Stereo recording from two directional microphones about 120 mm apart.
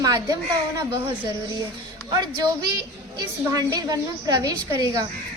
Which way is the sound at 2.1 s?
35° right (ahead or behind).